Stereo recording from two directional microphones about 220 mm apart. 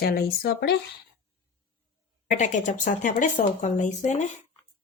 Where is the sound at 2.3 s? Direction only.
35° left (ahead or behind).